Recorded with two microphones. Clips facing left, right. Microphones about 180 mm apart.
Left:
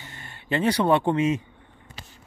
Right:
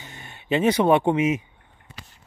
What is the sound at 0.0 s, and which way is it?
Speech, 20° right (ahead or behind).